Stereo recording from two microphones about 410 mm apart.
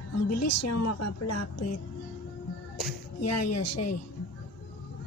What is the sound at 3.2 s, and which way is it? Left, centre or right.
Speech, left.